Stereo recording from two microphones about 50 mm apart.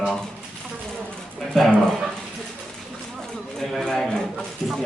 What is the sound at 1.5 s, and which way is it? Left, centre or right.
Dog, centre.